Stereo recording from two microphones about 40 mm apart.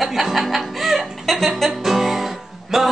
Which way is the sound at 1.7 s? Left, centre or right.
Centre.